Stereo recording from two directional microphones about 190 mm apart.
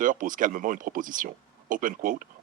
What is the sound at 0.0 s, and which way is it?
Speech, 45° right (ahead or behind).